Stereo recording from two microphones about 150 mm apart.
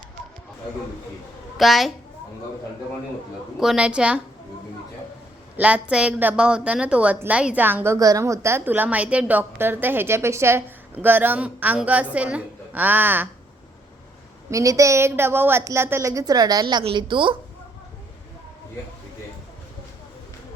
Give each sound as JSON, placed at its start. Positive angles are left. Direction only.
{"t": 1.5, "sound": "a woman's voice", "side_deg": 0}
{"t": 3.6, "sound": "a woman's voice", "side_deg": -5}
{"t": 5.5, "sound": "a woman's voice", "side_deg": -10}
{"t": 14.5, "sound": "a woman's voice", "side_deg": -20}